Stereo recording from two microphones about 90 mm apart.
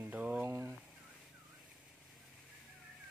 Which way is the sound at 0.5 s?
35° right (ahead or behind).